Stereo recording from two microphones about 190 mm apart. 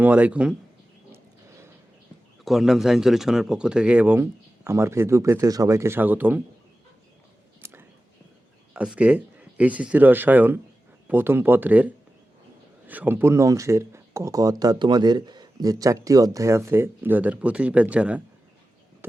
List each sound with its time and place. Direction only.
0.0 s speech: 10° right (ahead or behind)
2.4 s speech: centre (ahead or behind)
7.6 s a sound: 10° right (ahead or behind)
8.7 s speech: 5° right (ahead or behind)